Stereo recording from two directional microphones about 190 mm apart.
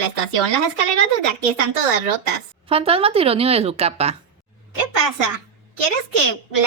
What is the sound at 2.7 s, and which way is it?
Speech, 30° right (ahead or behind).